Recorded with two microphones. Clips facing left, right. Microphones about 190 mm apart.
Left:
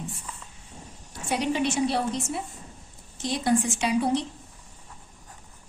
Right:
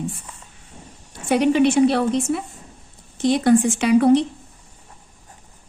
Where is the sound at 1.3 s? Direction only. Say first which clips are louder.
Right 10 dB; 60° right (ahead or behind).